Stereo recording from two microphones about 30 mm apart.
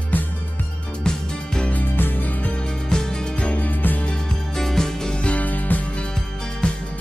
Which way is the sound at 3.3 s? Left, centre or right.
Left.